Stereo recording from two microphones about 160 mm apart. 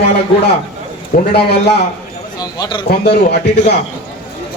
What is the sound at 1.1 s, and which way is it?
Speech, 60° left (ahead or behind).